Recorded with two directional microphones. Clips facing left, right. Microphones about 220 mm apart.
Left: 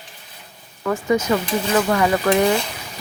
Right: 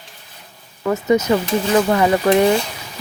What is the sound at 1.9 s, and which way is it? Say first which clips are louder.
Speech: right 3 dB; 25° right (ahead or behind).